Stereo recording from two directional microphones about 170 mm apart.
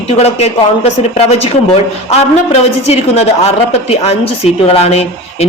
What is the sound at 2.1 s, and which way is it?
Speech, 40° left (ahead or behind).